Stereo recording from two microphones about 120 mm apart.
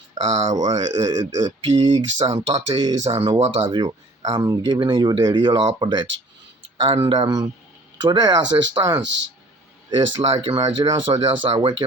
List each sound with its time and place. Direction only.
0.3 s speech: 65° right (ahead or behind)
0.8 s speech: 30° right (ahead or behind)
1.7 s speech: 55° right (ahead or behind)
3.7 s speech: 35° right (ahead or behind)
6.8 s speech: 50° right (ahead or behind)
10.5 s speech: 35° right (ahead or behind)